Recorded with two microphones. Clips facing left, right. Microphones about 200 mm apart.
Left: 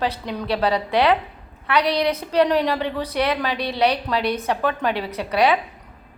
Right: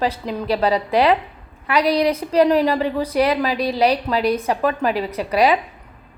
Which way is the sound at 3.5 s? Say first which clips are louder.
Right 5 dB; 35° right (ahead or behind).